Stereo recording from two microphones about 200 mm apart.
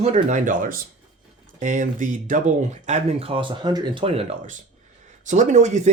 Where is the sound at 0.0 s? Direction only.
35° right (ahead or behind).